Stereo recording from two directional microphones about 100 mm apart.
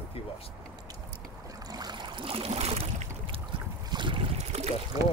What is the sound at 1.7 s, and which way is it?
Boat, 45° right (ahead or behind).